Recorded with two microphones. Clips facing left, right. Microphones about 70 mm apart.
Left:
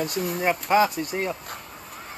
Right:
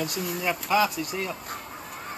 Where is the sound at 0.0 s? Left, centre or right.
Left.